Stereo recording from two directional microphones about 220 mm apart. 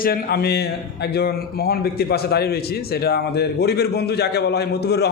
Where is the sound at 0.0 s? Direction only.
45° left (ahead or behind).